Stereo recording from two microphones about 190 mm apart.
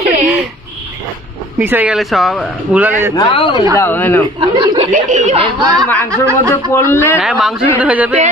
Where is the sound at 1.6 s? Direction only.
10° right (ahead or behind).